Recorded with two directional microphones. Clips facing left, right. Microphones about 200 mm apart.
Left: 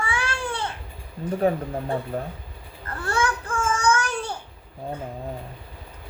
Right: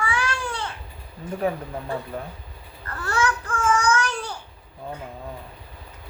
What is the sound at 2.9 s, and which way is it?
Babbling, 25° left (ahead or behind).